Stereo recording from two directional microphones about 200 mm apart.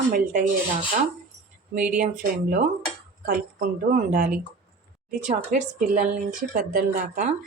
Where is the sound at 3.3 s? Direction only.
45° right (ahead or behind).